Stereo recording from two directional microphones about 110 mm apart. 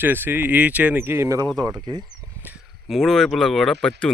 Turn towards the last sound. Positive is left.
turn(degrees=10)  # may be behind; listen again after turning